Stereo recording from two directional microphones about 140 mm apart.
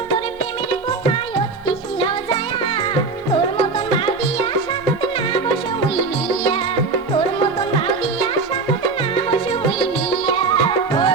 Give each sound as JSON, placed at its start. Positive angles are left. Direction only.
{"t": 3.9, "sound": "music", "side_deg": 40}
{"t": 6.2, "sound": "music", "side_deg": 35}
{"t": 10.1, "sound": "music", "side_deg": 35}